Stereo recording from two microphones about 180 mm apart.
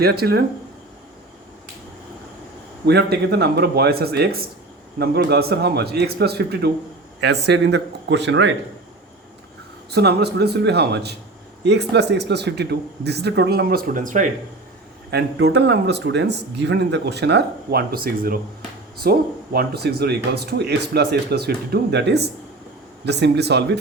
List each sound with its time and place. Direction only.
0.0 s speech: 60° right (ahead or behind)
2.8 s speech: 65° right (ahead or behind); by 8.5 s 85° right
9.9 s speech: 65° right (ahead or behind); by 14.3 s 45° right (ahead or behind)
15.1 s speech: 70° right (ahead or behind)